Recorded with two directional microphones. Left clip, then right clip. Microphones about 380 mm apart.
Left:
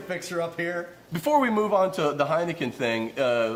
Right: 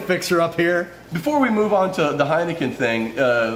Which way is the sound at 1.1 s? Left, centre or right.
Left.